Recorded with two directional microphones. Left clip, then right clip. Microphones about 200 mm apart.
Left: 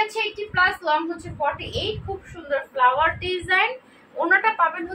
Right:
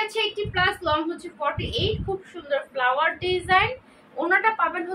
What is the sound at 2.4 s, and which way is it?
A woman's voice, 10° right (ahead or behind).